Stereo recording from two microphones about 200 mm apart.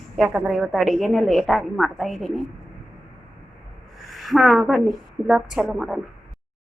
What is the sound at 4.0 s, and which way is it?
A woman's voice, centre (ahead or behind).